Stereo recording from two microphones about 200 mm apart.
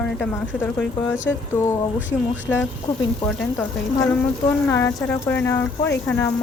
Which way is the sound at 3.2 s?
5° left (ahead or behind).